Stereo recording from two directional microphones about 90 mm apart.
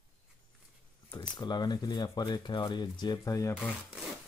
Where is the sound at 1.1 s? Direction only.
55° left (ahead or behind); by 3.6 s 35° left (ahead or behind).